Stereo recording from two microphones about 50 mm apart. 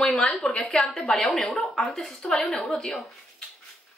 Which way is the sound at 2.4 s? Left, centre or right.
Left.